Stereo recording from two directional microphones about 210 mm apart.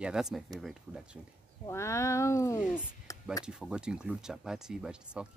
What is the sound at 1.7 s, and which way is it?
Speech, 15° left (ahead or behind).